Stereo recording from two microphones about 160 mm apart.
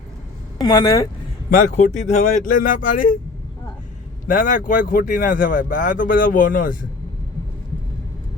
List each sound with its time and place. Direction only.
0.6 s speech: 20° left (ahead or behind)
1.5 s speech: 55° left (ahead or behind)
4.3 s speech: 55° left (ahead or behind)